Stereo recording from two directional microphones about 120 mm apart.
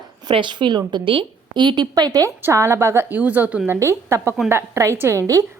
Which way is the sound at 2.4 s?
25° right (ahead or behind).